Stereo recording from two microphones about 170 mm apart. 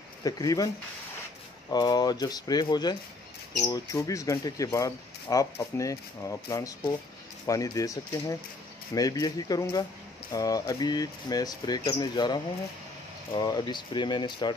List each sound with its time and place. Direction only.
0.2 s speech: 20° left (ahead or behind)
1.7 s speech: 25° left (ahead or behind)